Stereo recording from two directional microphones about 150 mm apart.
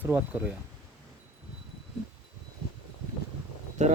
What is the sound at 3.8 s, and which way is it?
Speech, 50° right (ahead or behind).